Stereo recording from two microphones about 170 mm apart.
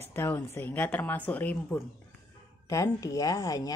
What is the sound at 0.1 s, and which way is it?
Speech, 10° left (ahead or behind).